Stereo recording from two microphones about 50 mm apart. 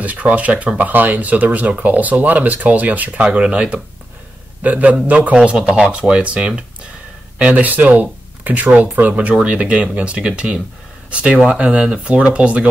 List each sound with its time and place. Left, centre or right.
0.0 s speech: right